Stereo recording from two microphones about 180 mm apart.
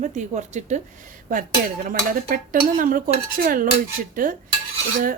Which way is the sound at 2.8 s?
50° right (ahead or behind).